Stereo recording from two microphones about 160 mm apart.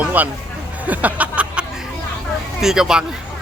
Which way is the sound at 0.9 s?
10° right (ahead or behind).